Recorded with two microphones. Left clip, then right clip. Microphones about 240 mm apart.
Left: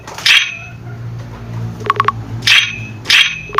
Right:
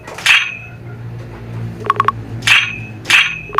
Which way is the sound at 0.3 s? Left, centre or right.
Centre.